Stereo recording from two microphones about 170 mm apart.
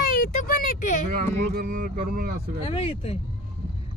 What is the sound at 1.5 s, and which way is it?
Speech, 55° right (ahead or behind).